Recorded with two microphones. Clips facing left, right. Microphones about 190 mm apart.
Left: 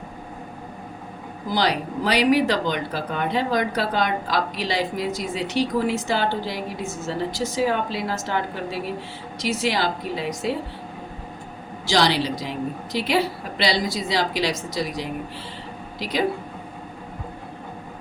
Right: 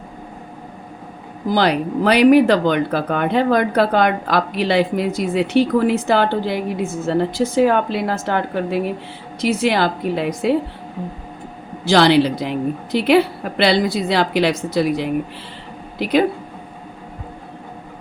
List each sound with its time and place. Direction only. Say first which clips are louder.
1.5 s speech: right 6 dB; 55° right (ahead or behind)
11.9 s speech: right 8 dB; 60° right (ahead or behind)